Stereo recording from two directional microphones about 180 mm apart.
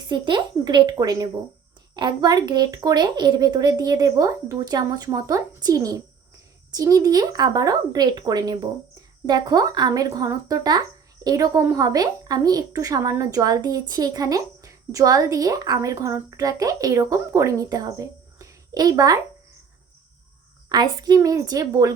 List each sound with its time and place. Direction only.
0.1 s speech: 25° right (ahead or behind)
20.7 s speech: 20° right (ahead or behind)